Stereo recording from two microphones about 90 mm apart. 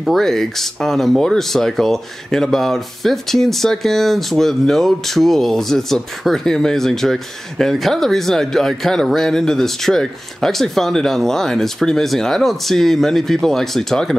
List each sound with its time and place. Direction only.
0.0 s speech: centre (ahead or behind)